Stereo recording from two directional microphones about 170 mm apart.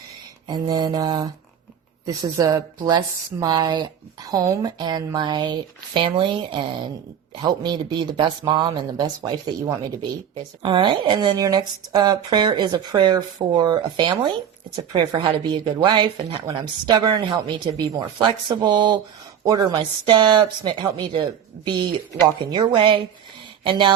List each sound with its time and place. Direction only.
0.4 s speech: 25° right (ahead or behind)